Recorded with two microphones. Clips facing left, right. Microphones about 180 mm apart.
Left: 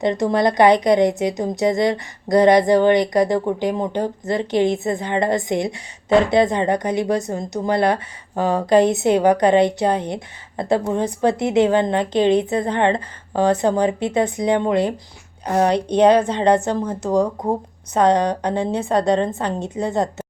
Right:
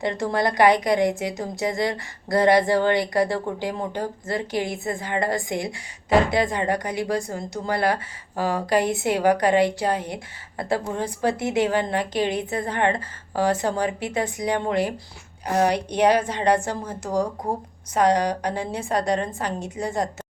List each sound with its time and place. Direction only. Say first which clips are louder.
0.0 s a woman's voice: left 6 dB; 20° left (ahead or behind)